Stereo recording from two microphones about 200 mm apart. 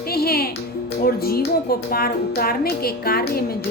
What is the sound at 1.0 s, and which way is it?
A woman's voice, 50° left (ahead or behind).